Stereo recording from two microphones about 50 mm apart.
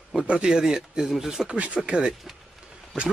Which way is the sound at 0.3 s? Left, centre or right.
Centre.